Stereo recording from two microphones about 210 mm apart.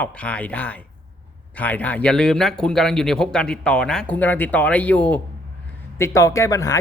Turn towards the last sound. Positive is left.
turn(degrees=15)  # may be behind; listen again after turning